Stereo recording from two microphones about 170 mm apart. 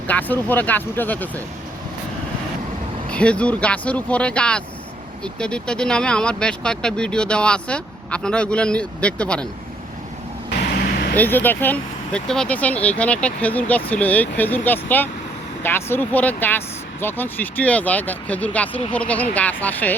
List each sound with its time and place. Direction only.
0.1 s speech: 10° left (ahead or behind)
3.1 s speech: 5° left (ahead or behind)
10.5 s vehicle: 65° left (ahead or behind)
11.2 s speech: 10° left (ahead or behind)